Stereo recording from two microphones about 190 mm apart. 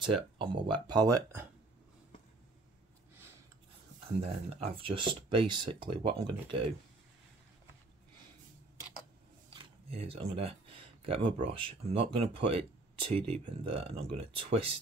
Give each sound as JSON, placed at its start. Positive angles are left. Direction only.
{"t": 0.0, "sound": "speech", "side_deg": -25}
{"t": 4.2, "sound": "speech", "side_deg": -30}
{"t": 9.5, "sound": "a sound", "side_deg": -30}
{"t": 11.4, "sound": "speech", "side_deg": -30}